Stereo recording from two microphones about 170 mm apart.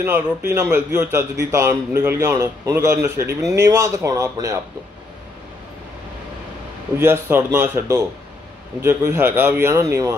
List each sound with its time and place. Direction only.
0.0 s a man's voice: 15° right (ahead or behind)
7.0 s a man's voice: 15° right (ahead or behind)